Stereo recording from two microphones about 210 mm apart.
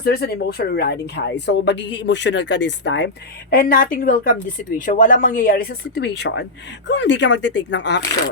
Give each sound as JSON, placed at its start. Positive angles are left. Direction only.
{"t": 0.0, "sound": "a woman's voice", "side_deg": 50}
{"t": 3.5, "sound": "a woman's voice", "side_deg": 45}